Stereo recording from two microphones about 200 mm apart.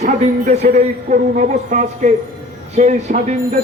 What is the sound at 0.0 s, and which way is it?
A man's voice, 35° right (ahead or behind).